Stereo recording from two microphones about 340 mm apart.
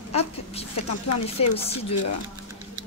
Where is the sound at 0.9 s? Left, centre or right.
Left.